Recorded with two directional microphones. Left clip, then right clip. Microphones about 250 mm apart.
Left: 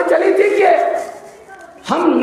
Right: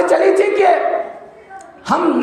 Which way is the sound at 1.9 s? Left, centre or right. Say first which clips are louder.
Right 1 dB; right.